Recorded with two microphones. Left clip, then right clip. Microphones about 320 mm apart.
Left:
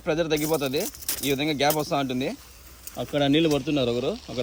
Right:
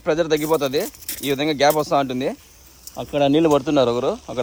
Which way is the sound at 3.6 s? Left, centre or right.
Centre.